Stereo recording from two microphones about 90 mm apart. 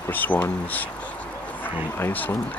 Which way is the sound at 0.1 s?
20° left (ahead or behind).